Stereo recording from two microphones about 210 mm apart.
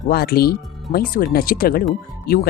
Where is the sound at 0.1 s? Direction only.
45° left (ahead or behind).